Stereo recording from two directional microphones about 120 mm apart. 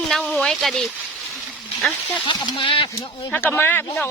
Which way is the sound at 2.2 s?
40° left (ahead or behind).